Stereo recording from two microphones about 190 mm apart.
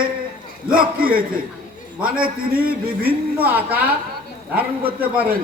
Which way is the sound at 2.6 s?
50° right (ahead or behind).